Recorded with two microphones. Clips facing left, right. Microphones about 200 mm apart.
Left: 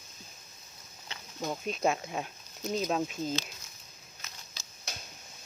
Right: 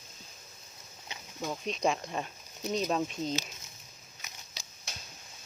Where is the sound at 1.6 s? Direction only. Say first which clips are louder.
Even; 5° left (ahead or behind).